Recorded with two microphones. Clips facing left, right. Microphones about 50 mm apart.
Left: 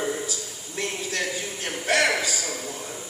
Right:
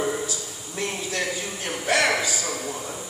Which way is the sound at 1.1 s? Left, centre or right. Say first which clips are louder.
Right 1 dB; right.